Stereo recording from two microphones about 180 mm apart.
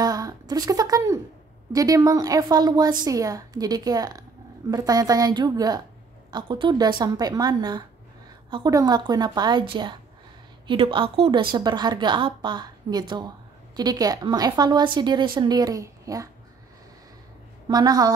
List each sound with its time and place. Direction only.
0.0 s a sound: 20° right (ahead or behind)
1.7 s a woman's voice: 20° right (ahead or behind)
17.6 s a woman's voice: 20° right (ahead or behind)